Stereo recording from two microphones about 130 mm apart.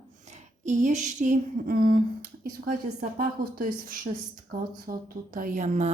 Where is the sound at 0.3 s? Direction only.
65° right (ahead or behind); by 2.0 s 90° right.